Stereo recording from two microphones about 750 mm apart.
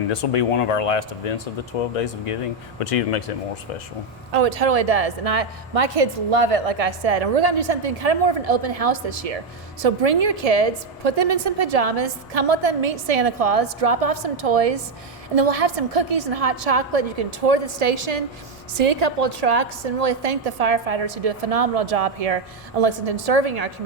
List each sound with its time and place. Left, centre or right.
0.1 s speech: left
4.3 s a woman's voice: right